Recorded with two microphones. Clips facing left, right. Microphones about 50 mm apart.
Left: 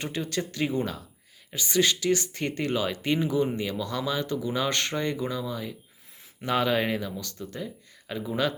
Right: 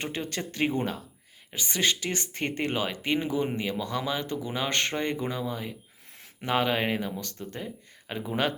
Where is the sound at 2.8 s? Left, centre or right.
Centre.